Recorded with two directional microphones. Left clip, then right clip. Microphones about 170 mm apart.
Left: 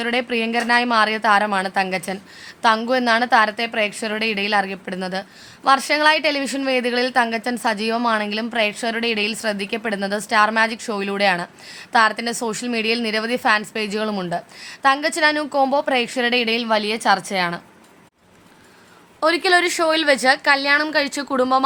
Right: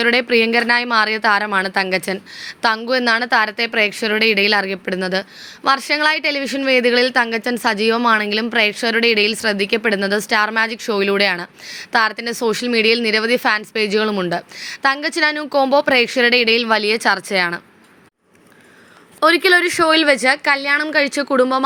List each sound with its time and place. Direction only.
0.0 s a woman's voice: 25° right (ahead or behind)
19.2 s a woman's voice: 20° right (ahead or behind)